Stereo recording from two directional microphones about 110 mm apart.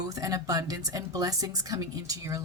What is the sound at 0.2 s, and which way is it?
A woman's voice, 30° right (ahead or behind).